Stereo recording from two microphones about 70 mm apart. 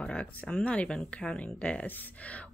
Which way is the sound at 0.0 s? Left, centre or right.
Centre.